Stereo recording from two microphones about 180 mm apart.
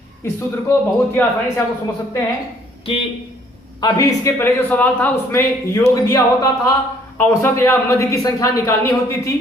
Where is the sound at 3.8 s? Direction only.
20° left (ahead or behind).